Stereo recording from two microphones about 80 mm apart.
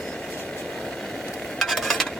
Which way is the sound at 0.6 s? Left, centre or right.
Centre.